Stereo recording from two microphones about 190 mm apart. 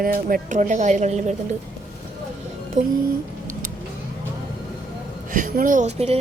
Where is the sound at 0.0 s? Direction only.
50° right (ahead or behind).